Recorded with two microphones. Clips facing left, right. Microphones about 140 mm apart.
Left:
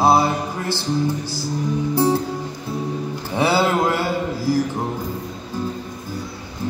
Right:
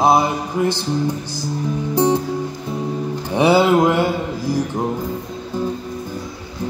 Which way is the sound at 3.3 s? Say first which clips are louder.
Right 5 dB; 20° right (ahead or behind).